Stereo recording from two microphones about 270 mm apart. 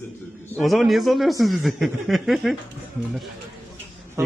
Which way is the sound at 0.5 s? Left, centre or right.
Centre.